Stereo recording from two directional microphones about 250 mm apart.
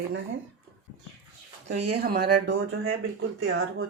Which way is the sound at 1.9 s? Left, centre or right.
Right.